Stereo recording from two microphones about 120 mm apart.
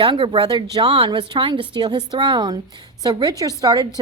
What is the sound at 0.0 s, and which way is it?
A woman's voice, 45° right (ahead or behind).